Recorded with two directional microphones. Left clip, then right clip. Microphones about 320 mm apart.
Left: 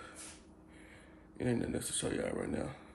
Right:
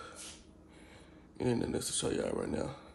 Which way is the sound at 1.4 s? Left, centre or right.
Centre.